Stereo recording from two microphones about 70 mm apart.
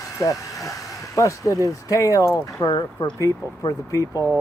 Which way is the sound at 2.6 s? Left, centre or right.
Left.